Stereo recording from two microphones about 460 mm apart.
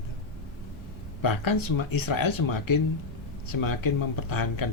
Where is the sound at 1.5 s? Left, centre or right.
Left.